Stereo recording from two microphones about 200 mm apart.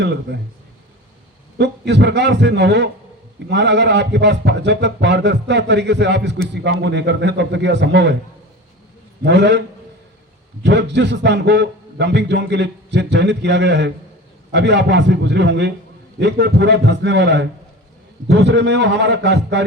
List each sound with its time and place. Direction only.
0.0 s a man's voice: 60° right (ahead or behind)
1.5 s a man's voice: 60° right (ahead or behind)
9.2 s a man's voice: 60° right (ahead or behind)